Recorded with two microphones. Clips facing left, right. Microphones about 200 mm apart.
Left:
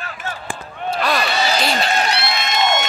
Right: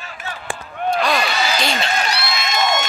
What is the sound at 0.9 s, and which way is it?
Basketball bounce, 5° left (ahead or behind).